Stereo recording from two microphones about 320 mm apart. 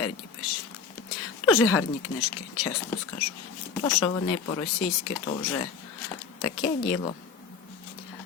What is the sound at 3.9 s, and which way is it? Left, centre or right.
Speech, centre.